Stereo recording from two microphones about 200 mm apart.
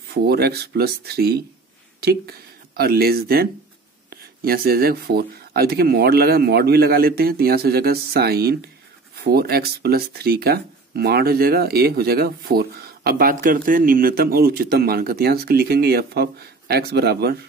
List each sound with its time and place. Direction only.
0.1 s speech: 50° right (ahead or behind)